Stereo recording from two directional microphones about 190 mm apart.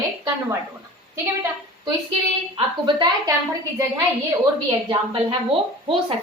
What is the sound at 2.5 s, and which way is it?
Speech, 25° right (ahead or behind).